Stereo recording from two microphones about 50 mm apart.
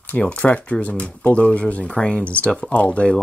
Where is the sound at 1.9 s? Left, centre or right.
Centre.